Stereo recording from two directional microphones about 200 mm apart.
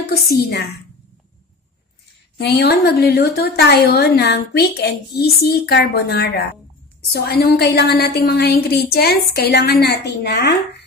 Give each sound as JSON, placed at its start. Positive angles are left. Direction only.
{"t": 0.0, "sound": "a woman's voice", "side_deg": 50}
{"t": 2.4, "sound": "a woman's voice", "side_deg": 55}